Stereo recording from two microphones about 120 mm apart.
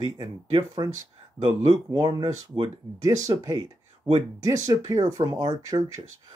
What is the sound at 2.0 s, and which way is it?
Speech, 35° right (ahead or behind).